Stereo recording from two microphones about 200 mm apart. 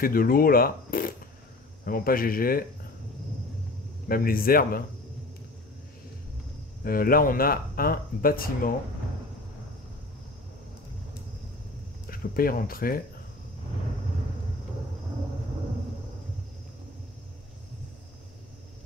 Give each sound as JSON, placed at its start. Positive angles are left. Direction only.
{"t": 0.0, "sound": "speech", "side_deg": 45}
{"t": 4.1, "sound": "speech", "side_deg": 45}
{"t": 6.8, "sound": "speech", "side_deg": 45}
{"t": 12.1, "sound": "speech", "side_deg": 45}